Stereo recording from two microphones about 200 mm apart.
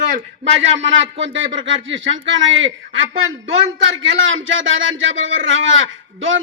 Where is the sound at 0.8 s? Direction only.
70° right (ahead or behind).